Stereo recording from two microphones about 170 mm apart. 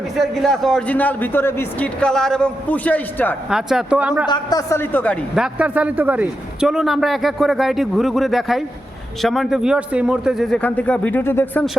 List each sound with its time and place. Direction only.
0.2 s a man's voice: centre (ahead or behind)
3.5 s speech: 5° right (ahead or behind)
4.3 s a man's voice: 25° left (ahead or behind)
5.3 s a man's voice: 5° right (ahead or behind); by 11.6 s 15° left (ahead or behind)